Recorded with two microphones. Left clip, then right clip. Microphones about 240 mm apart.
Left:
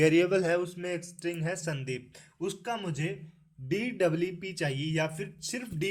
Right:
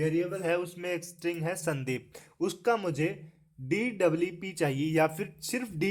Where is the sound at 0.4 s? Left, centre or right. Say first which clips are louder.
Left 1 dB; centre.